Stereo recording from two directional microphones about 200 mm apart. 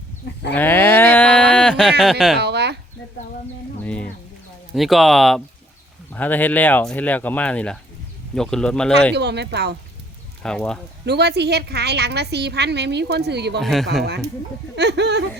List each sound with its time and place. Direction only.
0.5 s a sound: 10° left (ahead or behind)
2.4 s a sound: 55° right (ahead or behind)
4.7 s speech: centre (ahead or behind)
9.1 s a woman's voice: 60° right (ahead or behind)
10.4 s speech: 5° left (ahead or behind)
11.0 s a woman's voice: 55° right (ahead or behind)
13.6 s speech: centre (ahead or behind)
14.0 s a woman's voice: 55° right (ahead or behind)